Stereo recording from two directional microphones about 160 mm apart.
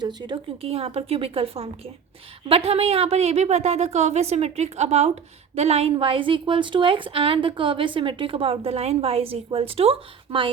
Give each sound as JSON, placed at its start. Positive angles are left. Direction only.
{"t": 0.0, "sound": "a woman's voice", "side_deg": -25}